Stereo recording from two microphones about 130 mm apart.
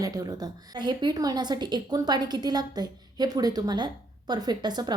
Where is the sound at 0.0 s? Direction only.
30° right (ahead or behind).